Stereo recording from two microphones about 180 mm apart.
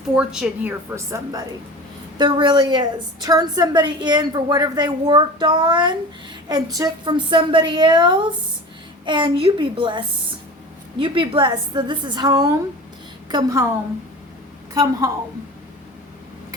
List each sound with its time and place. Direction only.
0.2 s a woman's voice: 5° right (ahead or behind); by 10.0 s 25° right (ahead or behind)
11.0 s a woman's voice: 30° right (ahead or behind)
14.7 s a woman's voice: 20° right (ahead or behind)